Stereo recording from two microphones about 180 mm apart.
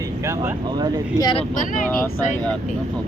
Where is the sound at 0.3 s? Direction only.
15° right (ahead or behind).